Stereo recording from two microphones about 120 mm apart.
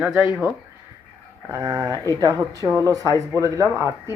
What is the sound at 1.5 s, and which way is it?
Speech, 30° right (ahead or behind).